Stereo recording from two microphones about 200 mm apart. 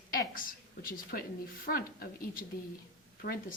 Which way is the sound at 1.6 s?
45° left (ahead or behind).